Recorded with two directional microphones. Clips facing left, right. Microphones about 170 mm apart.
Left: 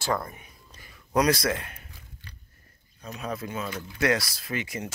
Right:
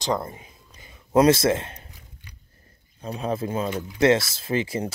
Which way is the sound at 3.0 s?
30° right (ahead or behind).